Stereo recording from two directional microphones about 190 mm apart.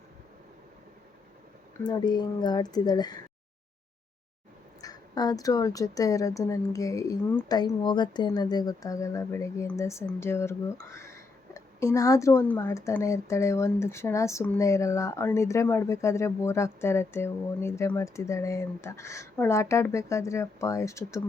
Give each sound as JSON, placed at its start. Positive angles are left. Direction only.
{"t": 1.8, "sound": "speech", "side_deg": 20}
{"t": 4.8, "sound": "speech", "side_deg": 20}